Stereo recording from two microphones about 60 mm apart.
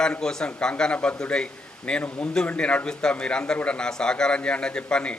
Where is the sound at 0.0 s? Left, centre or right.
Centre.